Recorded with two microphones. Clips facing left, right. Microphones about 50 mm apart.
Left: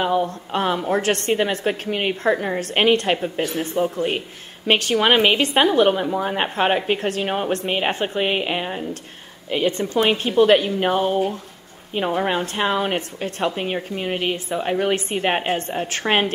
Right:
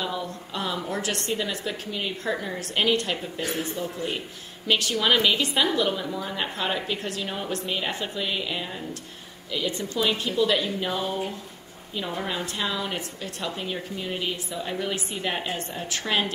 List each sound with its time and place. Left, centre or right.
0.0 s a woman's voice: left